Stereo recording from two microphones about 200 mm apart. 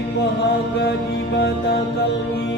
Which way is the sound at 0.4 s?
55° left (ahead or behind).